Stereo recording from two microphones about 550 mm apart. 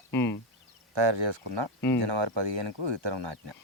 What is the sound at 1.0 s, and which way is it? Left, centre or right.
Speech, right.